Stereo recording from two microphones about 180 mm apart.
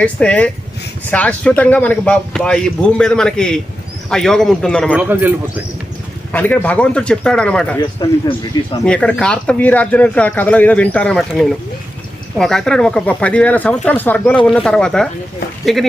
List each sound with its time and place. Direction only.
0.0 s speech: 5° left (ahead or behind)
4.9 s a man's voice: 10° right (ahead or behind)
6.3 s speech: 10° left (ahead or behind)
8.0 s speech: 20° left (ahead or behind)
8.8 s speech: 5° left (ahead or behind)